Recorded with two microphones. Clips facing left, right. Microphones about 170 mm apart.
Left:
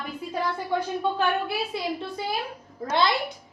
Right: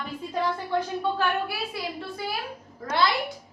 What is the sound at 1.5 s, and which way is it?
Speech, 20° left (ahead or behind).